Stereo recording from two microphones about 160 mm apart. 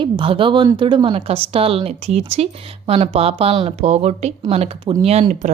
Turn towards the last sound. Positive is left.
turn(degrees=-45)  # may be behind; listen again after turning